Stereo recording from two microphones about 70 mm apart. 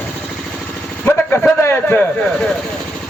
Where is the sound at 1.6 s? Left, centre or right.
Left.